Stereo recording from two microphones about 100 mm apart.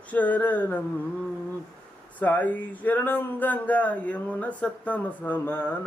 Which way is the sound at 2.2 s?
15° left (ahead or behind).